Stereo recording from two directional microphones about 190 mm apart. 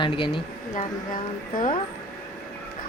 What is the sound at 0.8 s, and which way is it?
Speech, 45° left (ahead or behind).